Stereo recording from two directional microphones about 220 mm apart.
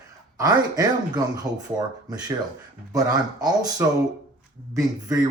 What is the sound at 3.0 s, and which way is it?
Speech, 15° right (ahead or behind).